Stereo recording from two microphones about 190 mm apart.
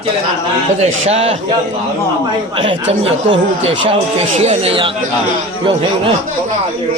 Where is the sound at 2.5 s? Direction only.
30° right (ahead or behind).